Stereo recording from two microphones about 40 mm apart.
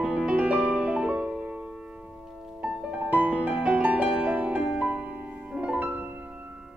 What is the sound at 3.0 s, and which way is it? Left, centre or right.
Music, right.